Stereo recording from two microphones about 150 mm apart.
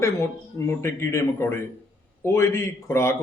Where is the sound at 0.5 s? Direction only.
20° left (ahead or behind).